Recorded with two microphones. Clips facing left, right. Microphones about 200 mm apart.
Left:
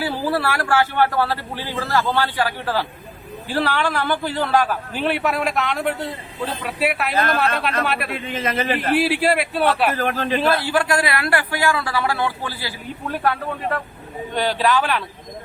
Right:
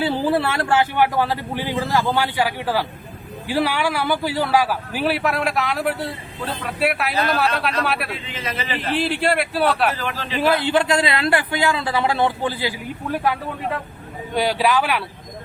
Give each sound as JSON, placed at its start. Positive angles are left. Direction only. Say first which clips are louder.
{"t": 0.0, "sound": "speech", "louder": "right 2 dB", "side_deg": -20}
{"t": 7.1, "sound": "a man's voice", "louder": "left 1 dB", "side_deg": 50}
{"t": 7.9, "sound": "speech", "louder": "even", "side_deg": 0}
{"t": 8.1, "sound": "a man's voice", "louder": "left 5 dB", "side_deg": 50}
{"t": 9.0, "sound": "speech", "louder": "right 1 dB", "side_deg": 5}
{"t": 9.9, "sound": "a man's voice", "louder": "left 5 dB", "side_deg": 50}
{"t": 10.4, "sound": "a man's voice", "louder": "right 5 dB", "side_deg": -15}
{"t": 14.3, "sound": "speech", "louder": "right 1 dB", "side_deg": -10}